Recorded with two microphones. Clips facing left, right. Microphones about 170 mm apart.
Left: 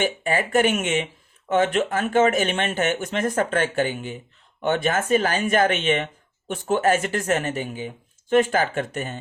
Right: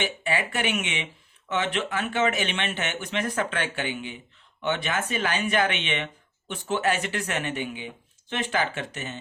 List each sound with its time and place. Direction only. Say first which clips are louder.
0.0 s speech: left 5 dB; 45° left (ahead or behind)